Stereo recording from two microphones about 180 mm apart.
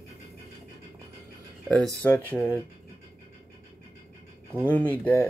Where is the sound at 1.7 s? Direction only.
5° left (ahead or behind).